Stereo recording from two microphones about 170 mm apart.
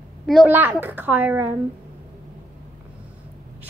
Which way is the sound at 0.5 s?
10° right (ahead or behind).